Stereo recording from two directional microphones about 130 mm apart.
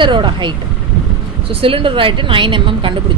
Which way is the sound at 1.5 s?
45° right (ahead or behind).